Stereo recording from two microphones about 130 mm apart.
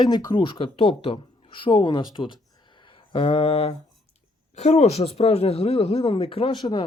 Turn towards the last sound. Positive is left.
turn(degrees=35)  # may be behind; listen again after turning